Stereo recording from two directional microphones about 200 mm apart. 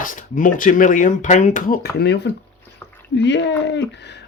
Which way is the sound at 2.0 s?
55° left (ahead or behind).